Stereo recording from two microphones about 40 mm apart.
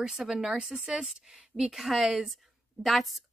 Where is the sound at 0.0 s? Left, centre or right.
Centre.